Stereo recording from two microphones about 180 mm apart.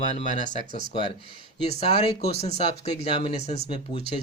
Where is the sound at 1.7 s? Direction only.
35° left (ahead or behind).